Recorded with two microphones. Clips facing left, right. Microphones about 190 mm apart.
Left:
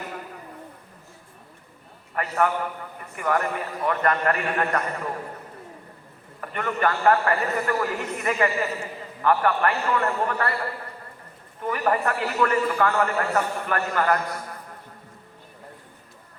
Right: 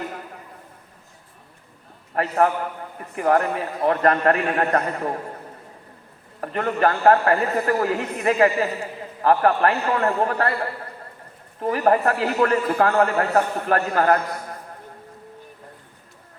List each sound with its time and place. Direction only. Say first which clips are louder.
2.1 s a man's voice: right 4 dB; 35° right (ahead or behind)
6.4 s a man's voice: right 4 dB; 35° right (ahead or behind)
11.6 s a man's voice: right 5 dB; 40° right (ahead or behind)